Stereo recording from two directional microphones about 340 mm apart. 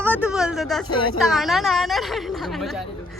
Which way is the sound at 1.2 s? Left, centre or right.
Centre.